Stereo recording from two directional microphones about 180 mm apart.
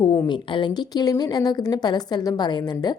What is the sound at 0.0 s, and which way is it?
A woman's voice, 25° left (ahead or behind).